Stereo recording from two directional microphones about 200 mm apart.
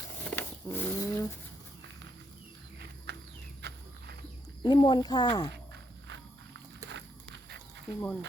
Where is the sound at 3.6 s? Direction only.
55° right (ahead or behind).